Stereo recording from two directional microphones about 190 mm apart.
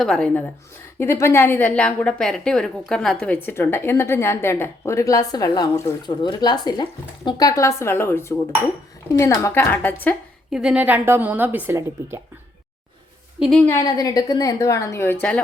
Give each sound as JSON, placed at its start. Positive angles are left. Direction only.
{"t": 0.0, "sound": "a woman's voice", "side_deg": 5}
{"t": 10.5, "sound": "speech", "side_deg": -5}
{"t": 13.4, "sound": "a woman's voice", "side_deg": 5}
{"t": 13.7, "sound": "a woman's voice", "side_deg": 15}